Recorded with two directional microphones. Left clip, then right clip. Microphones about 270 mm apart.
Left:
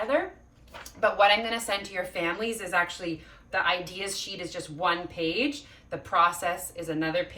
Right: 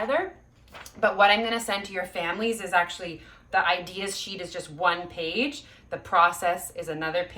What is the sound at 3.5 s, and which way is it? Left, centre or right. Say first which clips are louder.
A woman's voice: right 3 dB; centre.